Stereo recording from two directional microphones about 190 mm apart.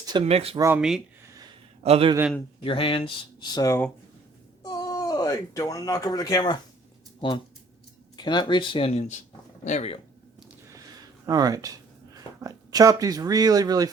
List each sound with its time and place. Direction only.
0.0 s speech: 25° right (ahead or behind)
0.8 s speech: centre (ahead or behind)
1.8 s a man's voice: 30° right (ahead or behind)
2.6 s speech: 30° left (ahead or behind)
3.5 s speech: 15° left (ahead or behind); by 10.0 s 35° left (ahead or behind)
11.3 s speech: 20° right (ahead or behind)